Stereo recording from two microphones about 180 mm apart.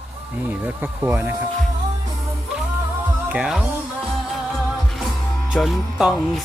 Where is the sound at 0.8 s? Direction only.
10° right (ahead or behind).